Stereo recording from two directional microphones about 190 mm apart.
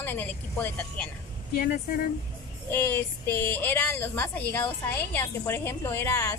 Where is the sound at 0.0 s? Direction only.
10° left (ahead or behind).